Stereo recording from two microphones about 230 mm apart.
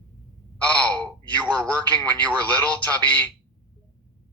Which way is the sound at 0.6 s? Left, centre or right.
Centre.